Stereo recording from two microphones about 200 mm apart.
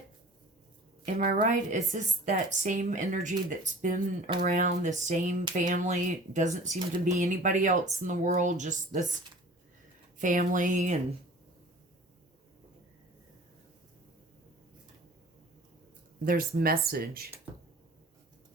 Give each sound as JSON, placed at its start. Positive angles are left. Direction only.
{"t": 1.0, "sound": "a woman's voice", "side_deg": -45}
{"t": 10.2, "sound": "a woman's voice", "side_deg": -40}
{"t": 16.2, "sound": "speech", "side_deg": -45}